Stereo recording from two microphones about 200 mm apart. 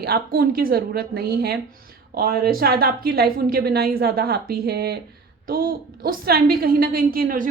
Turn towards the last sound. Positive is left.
turn(degrees=-45)  # may be behind; listen again after turning